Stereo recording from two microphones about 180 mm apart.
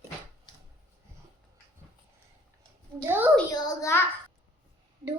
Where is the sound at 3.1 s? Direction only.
10° right (ahead or behind).